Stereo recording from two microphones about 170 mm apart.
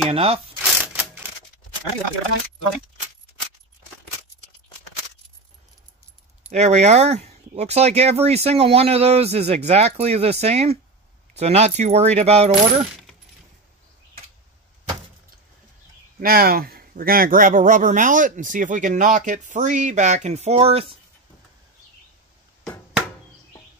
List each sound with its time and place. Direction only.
0.1 s speech: 35° right (ahead or behind)
0.6 s mechanisms: 10° right (ahead or behind)
6.5 s speech: 45° right (ahead or behind)
16.2 s speech: 60° right (ahead or behind); by 21.0 s 35° right (ahead or behind)